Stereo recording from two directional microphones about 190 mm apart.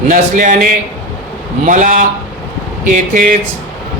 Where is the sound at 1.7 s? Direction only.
40° right (ahead or behind).